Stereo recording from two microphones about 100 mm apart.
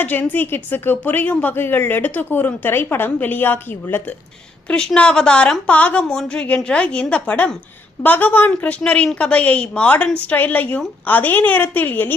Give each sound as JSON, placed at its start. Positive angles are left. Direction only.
{"t": 0.0, "sound": "a woman's voice", "side_deg": 15}
{"t": 4.7, "sound": "a woman's voice", "side_deg": 10}